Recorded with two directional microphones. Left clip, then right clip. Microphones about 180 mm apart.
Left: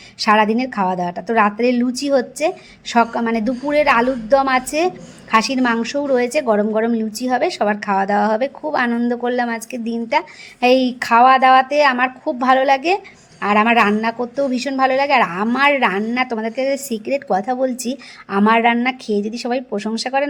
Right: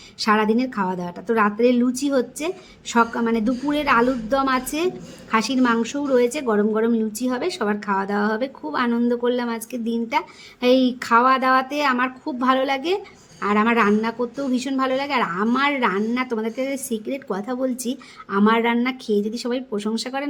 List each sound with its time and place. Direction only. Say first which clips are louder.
0.2 s a woman's voice: left 5 dB; 20° left (ahead or behind)